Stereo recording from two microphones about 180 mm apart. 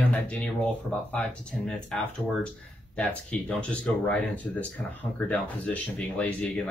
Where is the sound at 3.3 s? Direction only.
5° left (ahead or behind).